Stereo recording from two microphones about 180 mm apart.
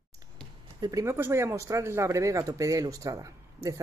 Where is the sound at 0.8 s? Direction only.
20° right (ahead or behind).